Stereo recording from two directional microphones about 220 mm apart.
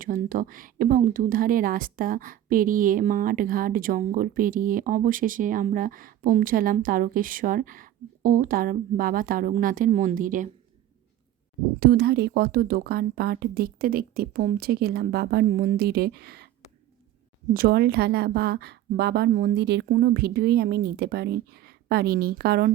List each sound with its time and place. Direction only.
0.0 s speech: 40° right (ahead or behind)
11.8 s a woman's voice: 45° right (ahead or behind)
17.5 s a woman's voice: 45° right (ahead or behind)